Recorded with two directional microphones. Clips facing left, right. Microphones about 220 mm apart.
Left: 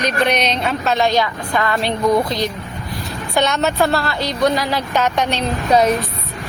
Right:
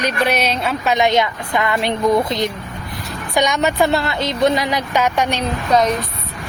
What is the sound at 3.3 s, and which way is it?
Speech, 15° right (ahead or behind).